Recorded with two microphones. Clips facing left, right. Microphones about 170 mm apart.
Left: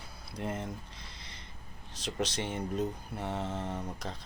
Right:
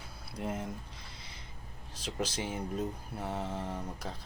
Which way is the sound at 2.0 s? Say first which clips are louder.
Left 1 dB; 5° right (ahead or behind).